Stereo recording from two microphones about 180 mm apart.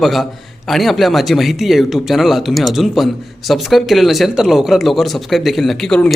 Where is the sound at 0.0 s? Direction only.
Centre (ahead or behind).